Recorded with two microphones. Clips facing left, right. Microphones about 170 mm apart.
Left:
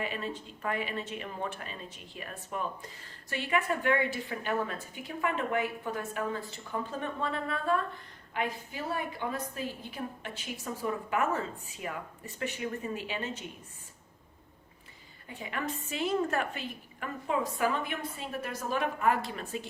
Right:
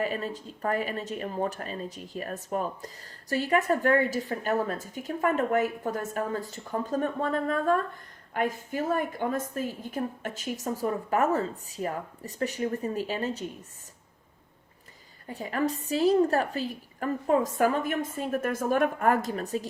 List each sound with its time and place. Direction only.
0.0 s speech: 40° right (ahead or behind)
15.3 s speech: 40° right (ahead or behind)